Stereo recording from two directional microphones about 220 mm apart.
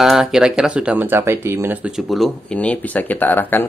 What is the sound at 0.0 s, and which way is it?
Speech, centre (ahead or behind).